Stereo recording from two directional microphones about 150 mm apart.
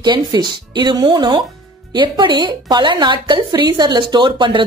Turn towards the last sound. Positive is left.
turn(degrees=-30)  # may be behind; listen again after turning